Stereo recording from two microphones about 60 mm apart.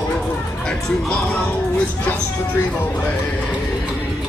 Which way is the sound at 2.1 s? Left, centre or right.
Left.